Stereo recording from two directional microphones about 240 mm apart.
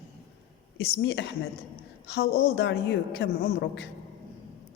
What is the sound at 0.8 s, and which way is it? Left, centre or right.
A woman's voice, left.